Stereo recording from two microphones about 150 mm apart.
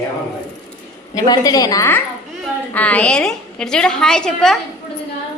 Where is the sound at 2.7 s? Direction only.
10° left (ahead or behind).